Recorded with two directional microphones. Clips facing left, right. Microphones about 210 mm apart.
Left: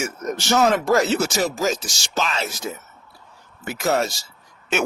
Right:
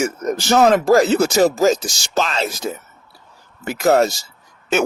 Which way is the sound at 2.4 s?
90° right.